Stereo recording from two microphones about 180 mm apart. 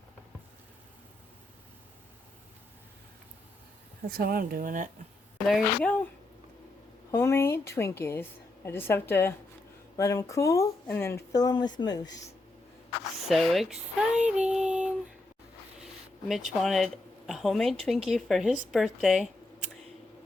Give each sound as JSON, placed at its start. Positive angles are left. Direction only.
{"t": 4.1, "sound": "speech", "side_deg": -55}
{"t": 5.5, "sound": "a woman's voice", "side_deg": 5}
{"t": 7.1, "sound": "a woman's voice", "side_deg": 15}
{"t": 13.2, "sound": "speech", "side_deg": 0}
{"t": 16.3, "sound": "speech", "side_deg": 0}